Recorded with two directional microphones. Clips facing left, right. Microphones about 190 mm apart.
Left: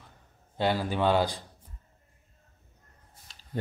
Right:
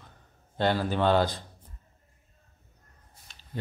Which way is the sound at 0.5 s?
10° left (ahead or behind).